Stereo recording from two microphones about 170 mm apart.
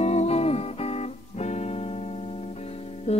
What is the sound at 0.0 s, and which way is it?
Music, 40° left (ahead or behind).